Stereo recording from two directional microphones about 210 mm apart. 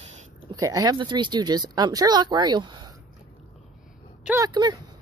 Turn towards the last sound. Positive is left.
turn(degrees=-15)  # may be behind; listen again after turning